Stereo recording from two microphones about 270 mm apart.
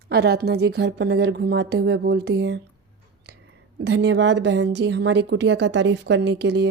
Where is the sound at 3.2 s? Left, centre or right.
Right.